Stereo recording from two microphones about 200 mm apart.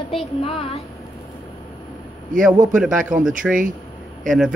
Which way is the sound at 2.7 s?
Centre (ahead or behind).